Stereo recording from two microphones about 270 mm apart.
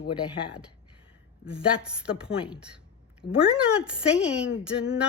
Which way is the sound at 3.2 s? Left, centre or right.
Left.